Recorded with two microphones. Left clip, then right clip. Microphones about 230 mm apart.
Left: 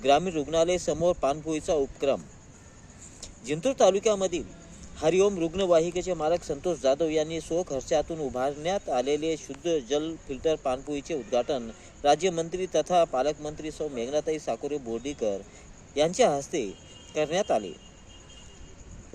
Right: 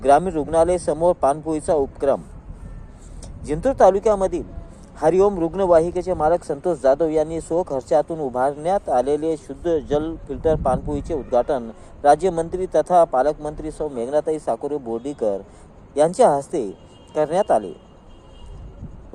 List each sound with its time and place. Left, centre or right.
0.0 s speech: centre
3.2 s a sound: centre
4.0 s speech: centre
7.1 s speech: right
7.3 s speech: centre